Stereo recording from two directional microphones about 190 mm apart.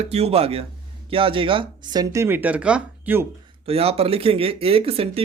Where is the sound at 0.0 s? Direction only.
35° right (ahead or behind); by 3.2 s 10° right (ahead or behind).